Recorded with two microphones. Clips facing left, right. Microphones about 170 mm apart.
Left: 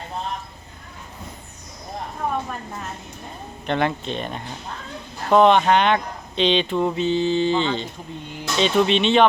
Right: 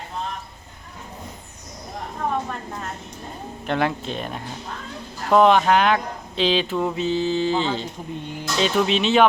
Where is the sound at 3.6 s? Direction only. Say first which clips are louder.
Left 1 dB; 5° right (ahead or behind).